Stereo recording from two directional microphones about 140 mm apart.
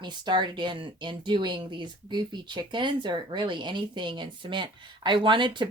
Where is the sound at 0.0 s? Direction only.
35° right (ahead or behind).